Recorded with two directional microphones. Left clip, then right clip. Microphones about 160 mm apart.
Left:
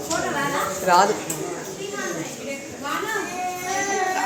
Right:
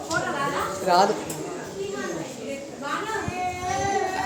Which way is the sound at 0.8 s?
5° right (ahead or behind).